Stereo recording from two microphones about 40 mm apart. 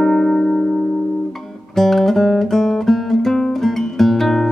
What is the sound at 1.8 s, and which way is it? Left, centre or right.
Guitar, centre.